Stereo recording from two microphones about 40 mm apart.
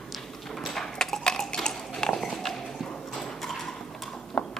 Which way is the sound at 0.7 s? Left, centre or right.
Centre.